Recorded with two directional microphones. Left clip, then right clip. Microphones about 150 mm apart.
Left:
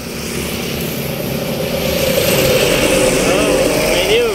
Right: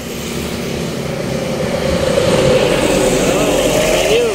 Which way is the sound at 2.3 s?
55° right (ahead or behind).